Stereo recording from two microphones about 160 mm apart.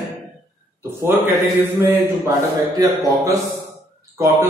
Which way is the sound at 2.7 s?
20° right (ahead or behind).